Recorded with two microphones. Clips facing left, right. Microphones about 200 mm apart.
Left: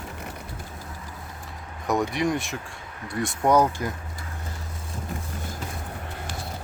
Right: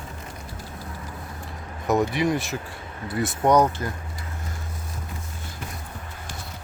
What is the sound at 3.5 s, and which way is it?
Speech, 10° left (ahead or behind).